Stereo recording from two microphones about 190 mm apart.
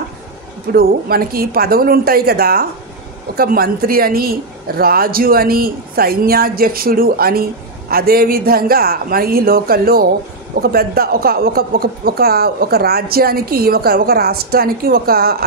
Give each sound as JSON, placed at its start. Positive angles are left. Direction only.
{"t": 0.7, "sound": "a woman's voice", "side_deg": -50}